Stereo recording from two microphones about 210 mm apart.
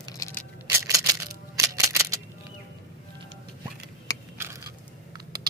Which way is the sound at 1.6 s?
15° right (ahead or behind).